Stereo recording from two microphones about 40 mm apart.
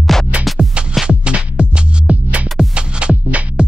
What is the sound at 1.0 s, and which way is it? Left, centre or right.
Music, right.